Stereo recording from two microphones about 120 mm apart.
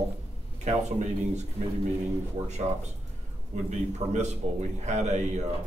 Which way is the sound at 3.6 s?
70° right (ahead or behind).